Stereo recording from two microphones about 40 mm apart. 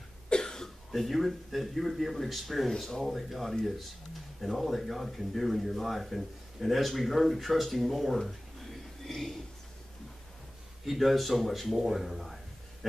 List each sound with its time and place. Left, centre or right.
0.3 s cough: centre
0.9 s speech: centre
8.2 s a sound: centre
10.9 s speech: centre